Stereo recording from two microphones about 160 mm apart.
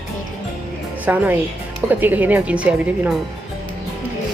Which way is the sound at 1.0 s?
10° right (ahead or behind).